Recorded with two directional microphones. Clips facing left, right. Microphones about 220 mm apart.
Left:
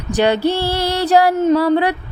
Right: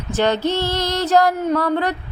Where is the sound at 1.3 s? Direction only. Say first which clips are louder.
Left 5 dB; 25° left (ahead or behind).